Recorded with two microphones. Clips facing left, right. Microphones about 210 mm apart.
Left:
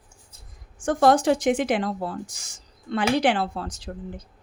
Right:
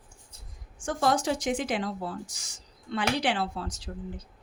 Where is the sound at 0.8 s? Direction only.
60° left (ahead or behind).